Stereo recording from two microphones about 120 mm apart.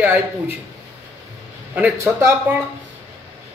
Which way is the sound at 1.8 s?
15° right (ahead or behind).